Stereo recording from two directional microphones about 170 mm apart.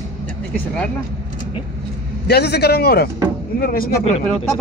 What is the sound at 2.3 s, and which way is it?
A man's voice, 75° left (ahead or behind).